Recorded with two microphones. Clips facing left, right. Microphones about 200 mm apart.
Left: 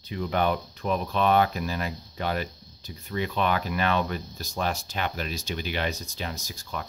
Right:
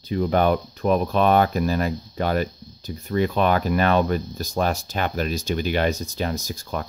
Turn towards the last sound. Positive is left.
turn(degrees=-45)  # may be behind; listen again after turning